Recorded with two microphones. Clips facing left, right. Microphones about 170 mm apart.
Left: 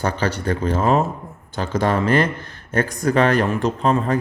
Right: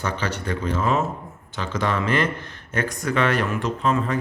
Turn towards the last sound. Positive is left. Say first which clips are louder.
# left 4 dB
turn(degrees=35)  # may be behind; listen again after turning